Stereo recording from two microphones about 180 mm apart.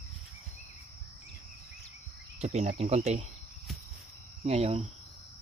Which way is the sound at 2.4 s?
40° right (ahead or behind).